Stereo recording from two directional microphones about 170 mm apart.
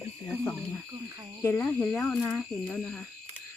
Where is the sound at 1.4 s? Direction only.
5° left (ahead or behind).